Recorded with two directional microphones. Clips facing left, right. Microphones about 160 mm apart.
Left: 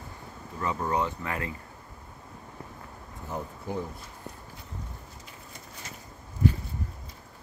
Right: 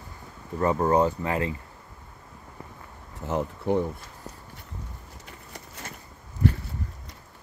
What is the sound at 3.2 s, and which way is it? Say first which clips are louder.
Speech: right 9 dB; 80° right.